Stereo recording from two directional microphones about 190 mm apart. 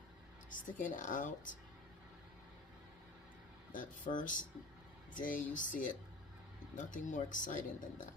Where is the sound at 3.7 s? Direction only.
45° left (ahead or behind).